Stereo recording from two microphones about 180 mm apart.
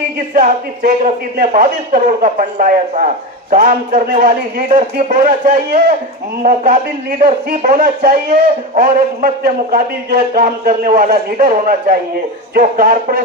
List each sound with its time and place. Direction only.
0.3 s speech: 45° right (ahead or behind)